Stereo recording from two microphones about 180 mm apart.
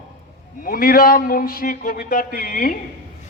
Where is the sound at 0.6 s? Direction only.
55° left (ahead or behind).